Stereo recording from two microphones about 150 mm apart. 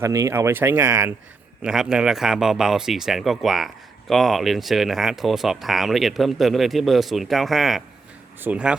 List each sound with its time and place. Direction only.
0.0 s speech: 20° right (ahead or behind)
1.6 s speech: 5° right (ahead or behind)